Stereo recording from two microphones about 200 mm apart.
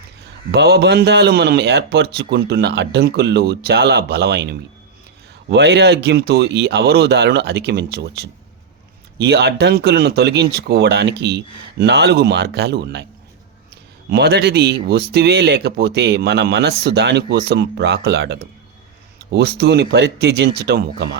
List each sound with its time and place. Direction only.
0.5 s a man's voice: 55° right (ahead or behind)
14.1 s a man's voice: 55° right (ahead or behind)